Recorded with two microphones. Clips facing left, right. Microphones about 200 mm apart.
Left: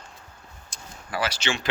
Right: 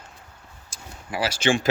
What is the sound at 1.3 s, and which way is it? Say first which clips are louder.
Speech: right 8 dB; 50° right (ahead or behind).